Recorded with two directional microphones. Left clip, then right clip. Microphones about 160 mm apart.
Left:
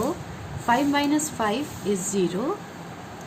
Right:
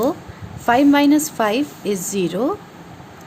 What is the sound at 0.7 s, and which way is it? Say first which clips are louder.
A woman's voice: right 8 dB; 70° right (ahead or behind).